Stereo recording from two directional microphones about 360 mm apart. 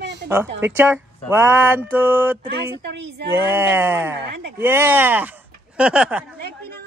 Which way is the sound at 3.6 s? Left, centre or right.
Centre.